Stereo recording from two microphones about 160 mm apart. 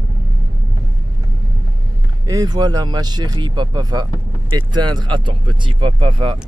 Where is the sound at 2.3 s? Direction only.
25° right (ahead or behind).